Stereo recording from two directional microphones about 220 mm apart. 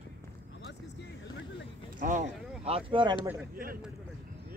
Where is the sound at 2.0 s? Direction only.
35° right (ahead or behind).